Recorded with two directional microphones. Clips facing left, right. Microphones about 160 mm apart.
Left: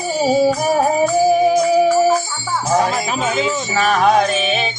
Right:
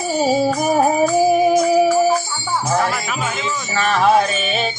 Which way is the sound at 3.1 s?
30° left (ahead or behind).